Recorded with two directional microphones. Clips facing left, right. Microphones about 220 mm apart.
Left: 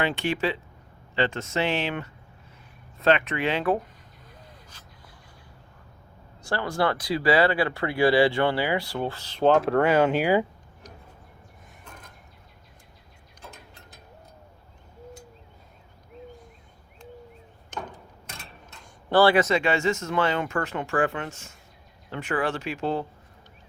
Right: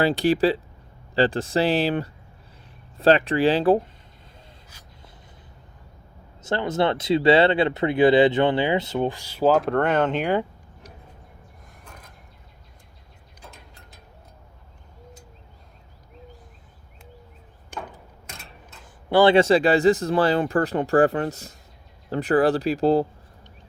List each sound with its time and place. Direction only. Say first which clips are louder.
0.0 s speech: right 7 dB; 35° right (ahead or behind)
4.7 s a sound: even; 10° right (ahead or behind)
6.4 s speech: right 3 dB; 20° right (ahead or behind); by 10.4 s 5° left (ahead or behind)
19.1 s speech: right 4 dB; 20° right (ahead or behind)